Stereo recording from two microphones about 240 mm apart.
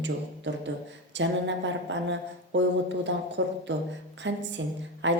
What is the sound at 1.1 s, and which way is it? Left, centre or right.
Speech, right.